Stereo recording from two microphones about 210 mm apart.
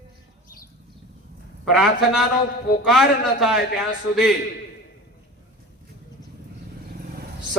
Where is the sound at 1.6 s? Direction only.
Centre (ahead or behind).